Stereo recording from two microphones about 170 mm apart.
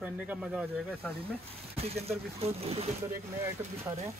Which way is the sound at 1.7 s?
35° right (ahead or behind).